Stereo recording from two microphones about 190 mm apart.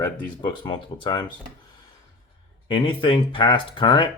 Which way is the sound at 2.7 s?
25° left (ahead or behind).